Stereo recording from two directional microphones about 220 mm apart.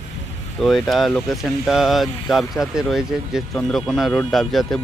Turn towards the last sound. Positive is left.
turn(degrees=0)  # may be behind; listen again after turning